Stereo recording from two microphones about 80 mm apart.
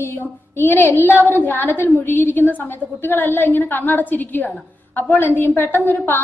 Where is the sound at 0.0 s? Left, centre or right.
Left.